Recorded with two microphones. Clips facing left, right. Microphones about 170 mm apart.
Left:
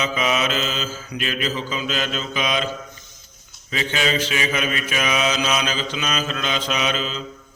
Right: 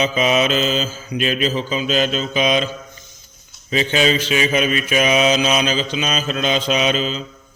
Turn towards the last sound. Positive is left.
turn(degrees=-20)  # may be behind; listen again after turning